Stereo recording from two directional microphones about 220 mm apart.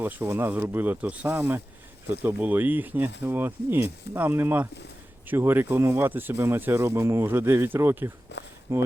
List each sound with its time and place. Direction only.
0.0 s speech: 10° right (ahead or behind)
8.3 s a sound: 50° left (ahead or behind)
8.7 s speech: 10° right (ahead or behind)